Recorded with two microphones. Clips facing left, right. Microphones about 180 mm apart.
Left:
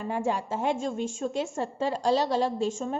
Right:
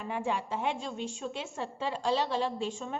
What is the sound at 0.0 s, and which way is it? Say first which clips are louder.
A woman's voice: left 4 dB; 40° left (ahead or behind).